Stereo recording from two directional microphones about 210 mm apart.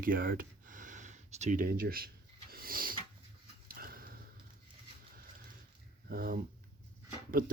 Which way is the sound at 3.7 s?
45° right (ahead or behind).